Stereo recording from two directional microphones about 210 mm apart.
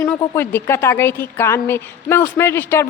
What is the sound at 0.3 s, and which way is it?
A woman's voice, 10° left (ahead or behind).